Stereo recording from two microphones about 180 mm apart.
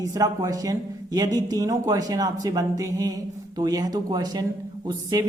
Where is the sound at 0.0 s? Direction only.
20° right (ahead or behind).